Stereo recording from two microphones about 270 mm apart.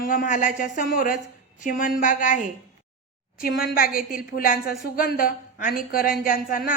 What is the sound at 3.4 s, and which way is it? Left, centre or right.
A woman's voice, left.